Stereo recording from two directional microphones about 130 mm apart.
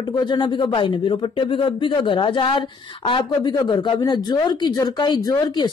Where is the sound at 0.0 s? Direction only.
35° left (ahead or behind).